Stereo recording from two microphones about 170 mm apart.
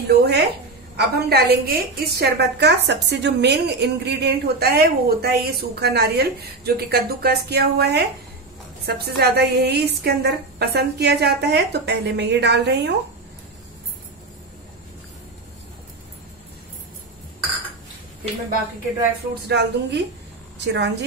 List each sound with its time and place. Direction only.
0.1 s a woman's voice: 70° right (ahead or behind)
19.4 s a woman's voice: 80° right
20.5 s a woman's voice: 90° right